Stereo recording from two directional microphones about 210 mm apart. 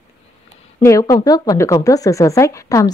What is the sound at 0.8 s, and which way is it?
Speech, 15° left (ahead or behind).